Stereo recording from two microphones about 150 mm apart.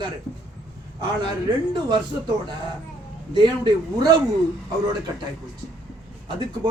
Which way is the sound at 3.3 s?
30° right (ahead or behind).